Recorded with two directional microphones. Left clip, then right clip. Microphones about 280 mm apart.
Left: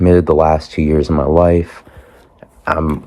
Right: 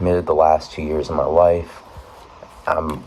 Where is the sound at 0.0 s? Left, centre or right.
Left.